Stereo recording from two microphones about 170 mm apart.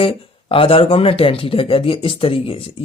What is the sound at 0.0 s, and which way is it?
Speech, 30° left (ahead or behind).